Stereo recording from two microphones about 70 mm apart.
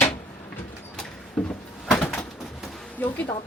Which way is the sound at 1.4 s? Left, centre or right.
Centre.